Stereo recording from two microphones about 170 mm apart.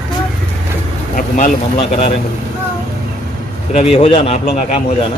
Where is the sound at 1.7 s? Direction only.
35° left (ahead or behind).